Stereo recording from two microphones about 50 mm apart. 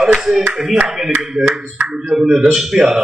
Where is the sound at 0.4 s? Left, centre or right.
Right.